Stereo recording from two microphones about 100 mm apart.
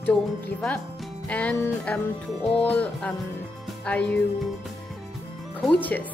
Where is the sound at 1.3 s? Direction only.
15° left (ahead or behind).